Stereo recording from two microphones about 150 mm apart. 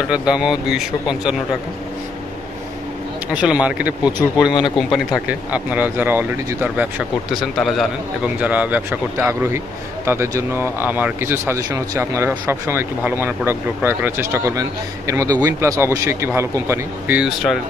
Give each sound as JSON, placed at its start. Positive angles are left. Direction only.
{"t": 0.1, "sound": "speech", "side_deg": -5}
{"t": 3.3, "sound": "speech", "side_deg": -10}
{"t": 7.2, "sound": "speech", "side_deg": 0}
{"t": 17.2, "sound": "speech", "side_deg": 0}